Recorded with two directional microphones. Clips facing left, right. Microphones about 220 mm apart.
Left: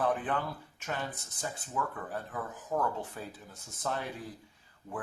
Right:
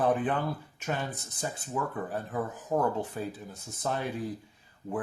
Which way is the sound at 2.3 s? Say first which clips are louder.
Right 5 dB; 30° right (ahead or behind).